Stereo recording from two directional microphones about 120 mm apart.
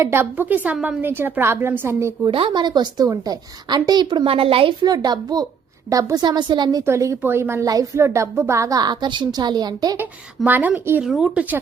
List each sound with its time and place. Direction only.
0.0 s a woman's voice: 20° right (ahead or behind)
2.2 s a woman's voice: 45° right (ahead or behind)
4.3 s a woman's voice: 50° right (ahead or behind)
4.8 s a woman's voice: 35° right (ahead or behind)
6.8 s a woman's voice: 25° right (ahead or behind)
10.0 s a woman's voice: 15° right (ahead or behind)
11.0 s speech: 5° right (ahead or behind)